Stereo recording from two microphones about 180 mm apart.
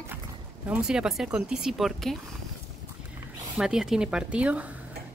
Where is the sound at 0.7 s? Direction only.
5° right (ahead or behind).